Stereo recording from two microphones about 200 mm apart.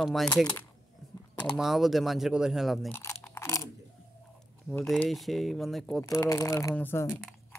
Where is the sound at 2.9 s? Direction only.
10° left (ahead or behind).